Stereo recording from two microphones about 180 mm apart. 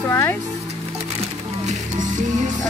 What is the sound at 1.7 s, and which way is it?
Music, 45° right (ahead or behind).